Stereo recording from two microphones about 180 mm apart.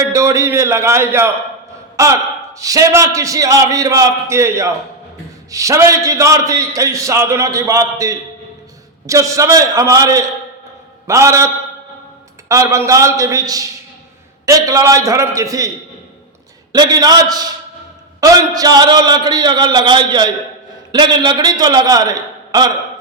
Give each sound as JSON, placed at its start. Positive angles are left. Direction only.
{"t": 0.0, "sound": "a man's voice", "side_deg": -15}
{"t": 16.7, "sound": "a man's voice", "side_deg": -20}